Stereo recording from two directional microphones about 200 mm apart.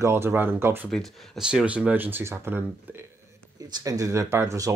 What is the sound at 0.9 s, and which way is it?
Speech, centre (ahead or behind).